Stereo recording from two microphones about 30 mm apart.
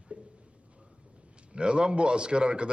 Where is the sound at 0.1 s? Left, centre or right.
Right.